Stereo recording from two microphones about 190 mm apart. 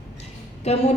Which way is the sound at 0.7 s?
35° left (ahead or behind).